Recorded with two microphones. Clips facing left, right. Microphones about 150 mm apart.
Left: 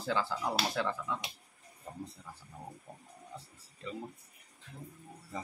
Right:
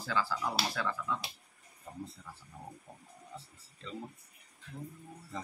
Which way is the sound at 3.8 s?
10° left (ahead or behind).